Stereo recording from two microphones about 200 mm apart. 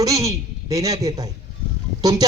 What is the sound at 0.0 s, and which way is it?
A man's voice, 15° right (ahead or behind).